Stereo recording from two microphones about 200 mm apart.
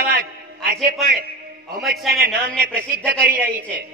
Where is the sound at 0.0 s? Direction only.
60° right (ahead or behind).